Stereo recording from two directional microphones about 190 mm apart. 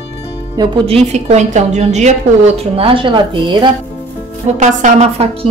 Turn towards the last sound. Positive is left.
turn(degrees=-30)  # may be behind; listen again after turning